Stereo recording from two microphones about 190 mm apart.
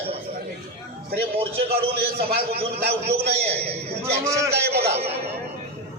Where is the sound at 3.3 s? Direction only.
30° right (ahead or behind).